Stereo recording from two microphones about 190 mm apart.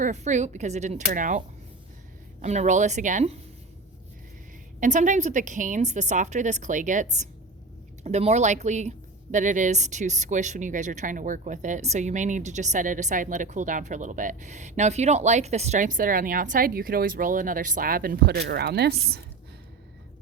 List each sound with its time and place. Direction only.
0.0 s speech: 40° right (ahead or behind)
2.4 s speech: 35° right (ahead or behind)
4.8 s speech: 40° right (ahead or behind)